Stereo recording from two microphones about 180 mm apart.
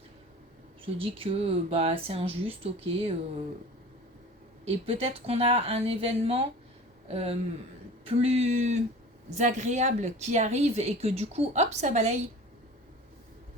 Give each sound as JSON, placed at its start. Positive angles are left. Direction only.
{"t": 0.9, "sound": "a woman's voice", "side_deg": -30}
{"t": 4.6, "sound": "a woman's voice", "side_deg": -35}